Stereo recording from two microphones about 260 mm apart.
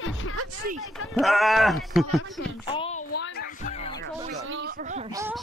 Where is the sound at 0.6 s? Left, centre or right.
Right.